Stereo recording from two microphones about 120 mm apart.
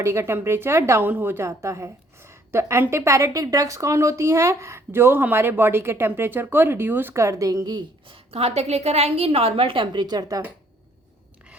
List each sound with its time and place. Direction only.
0.0 s a woman's voice: 20° right (ahead or behind)
8.1 s a woman's voice: 55° right (ahead or behind); by 10.4 s 30° right (ahead or behind)